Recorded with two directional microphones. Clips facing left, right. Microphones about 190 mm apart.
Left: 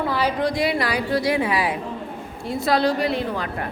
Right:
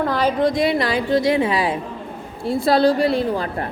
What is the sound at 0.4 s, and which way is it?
A woman's voice, 20° right (ahead or behind).